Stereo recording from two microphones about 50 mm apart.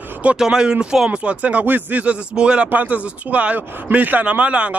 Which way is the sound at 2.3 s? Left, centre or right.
Centre.